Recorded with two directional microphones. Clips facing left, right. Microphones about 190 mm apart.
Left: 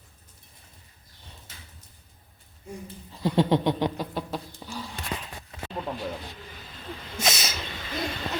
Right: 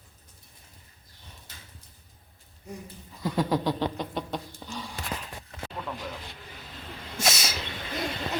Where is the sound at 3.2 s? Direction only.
25° left (ahead or behind).